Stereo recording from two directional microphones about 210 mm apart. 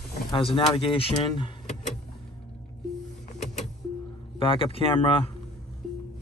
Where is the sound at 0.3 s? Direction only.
25° left (ahead or behind).